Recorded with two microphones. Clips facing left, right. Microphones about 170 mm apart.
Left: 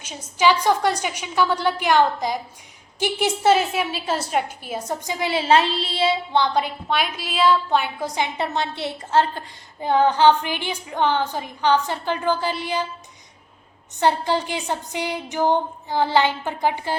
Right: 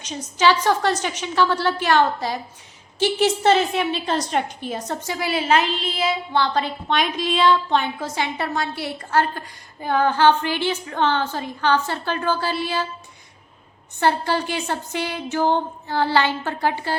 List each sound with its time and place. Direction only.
0.0 s a woman's voice: 10° left (ahead or behind)
14.0 s a woman's voice: 20° left (ahead or behind)